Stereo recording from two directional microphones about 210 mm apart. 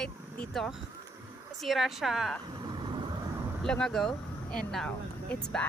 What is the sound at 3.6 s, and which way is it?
Speech, 5° left (ahead or behind).